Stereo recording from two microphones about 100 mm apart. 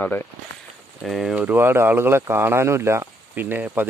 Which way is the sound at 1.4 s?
20° right (ahead or behind).